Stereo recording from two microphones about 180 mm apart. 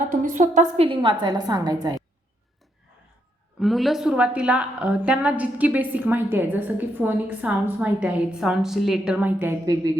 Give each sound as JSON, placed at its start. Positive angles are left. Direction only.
{"t": 0.1, "sound": "a woman's voice", "side_deg": -45}
{"t": 0.9, "sound": "a woman's voice", "side_deg": -25}
{"t": 3.6, "sound": "a woman's voice", "side_deg": 0}